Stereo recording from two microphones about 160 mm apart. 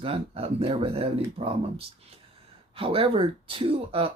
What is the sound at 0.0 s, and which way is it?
Speech, 35° right (ahead or behind).